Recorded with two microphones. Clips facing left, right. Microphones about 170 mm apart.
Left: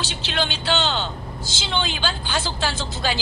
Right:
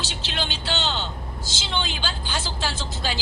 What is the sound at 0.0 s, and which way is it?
A woman's voice, 65° left (ahead or behind).